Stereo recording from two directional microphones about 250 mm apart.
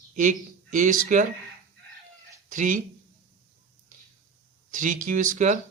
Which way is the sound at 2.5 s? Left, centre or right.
Right.